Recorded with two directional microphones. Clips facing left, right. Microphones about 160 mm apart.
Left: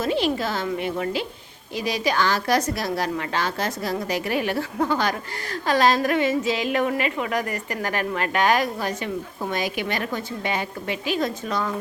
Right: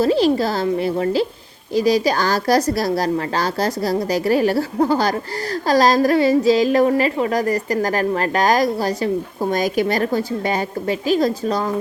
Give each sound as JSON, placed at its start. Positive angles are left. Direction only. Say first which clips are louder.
{"t": 0.0, "sound": "a woman's voice", "louder": "right 7 dB", "side_deg": -35}